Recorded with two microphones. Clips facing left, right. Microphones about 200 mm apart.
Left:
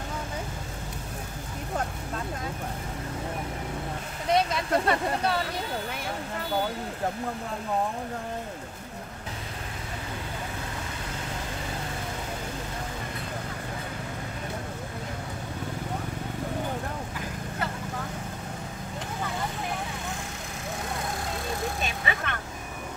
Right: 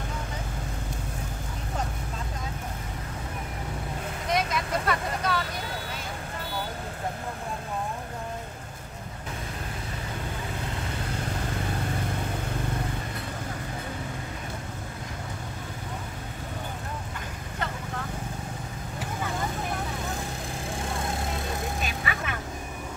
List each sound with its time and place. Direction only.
4.3 s vehicle: 30° left (ahead or behind)
22.1 s vehicle: 25° left (ahead or behind)